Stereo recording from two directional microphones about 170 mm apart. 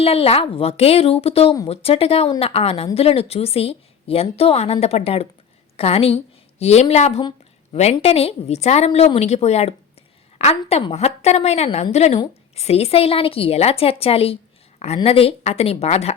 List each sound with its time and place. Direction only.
0.0 s a woman's voice: 35° left (ahead or behind)